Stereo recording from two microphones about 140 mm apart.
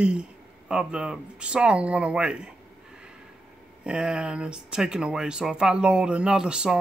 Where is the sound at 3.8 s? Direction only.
5° right (ahead or behind).